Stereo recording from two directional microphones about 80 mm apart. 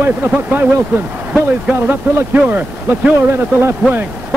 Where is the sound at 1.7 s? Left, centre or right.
Right.